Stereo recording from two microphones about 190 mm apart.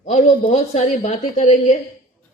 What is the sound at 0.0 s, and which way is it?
A woman's voice, 40° left (ahead or behind).